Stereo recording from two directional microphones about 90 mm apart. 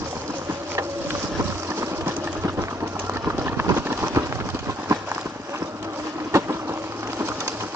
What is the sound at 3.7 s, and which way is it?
Clip-clop, 30° right (ahead or behind).